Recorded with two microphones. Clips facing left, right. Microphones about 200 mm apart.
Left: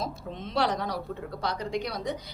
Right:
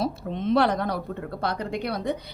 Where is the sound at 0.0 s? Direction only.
60° right (ahead or behind).